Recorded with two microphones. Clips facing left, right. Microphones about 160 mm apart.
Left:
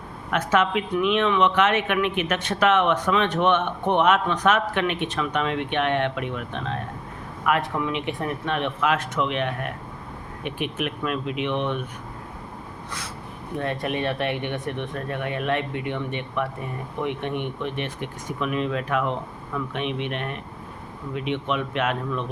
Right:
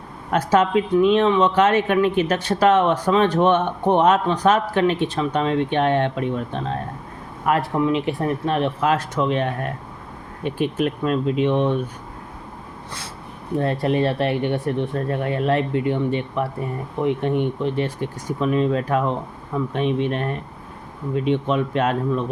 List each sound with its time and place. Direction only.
0.3 s speech: 35° right (ahead or behind)
13.6 s speech: 35° right (ahead or behind)